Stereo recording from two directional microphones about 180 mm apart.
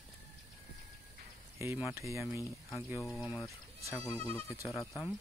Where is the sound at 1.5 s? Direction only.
15° right (ahead or behind).